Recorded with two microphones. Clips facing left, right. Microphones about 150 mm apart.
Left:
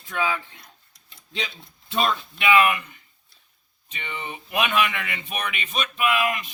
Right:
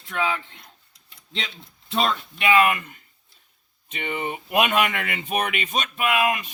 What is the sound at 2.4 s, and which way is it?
Speech, 40° right (ahead or behind).